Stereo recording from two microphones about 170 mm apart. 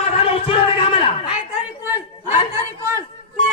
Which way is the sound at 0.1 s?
35° left (ahead or behind).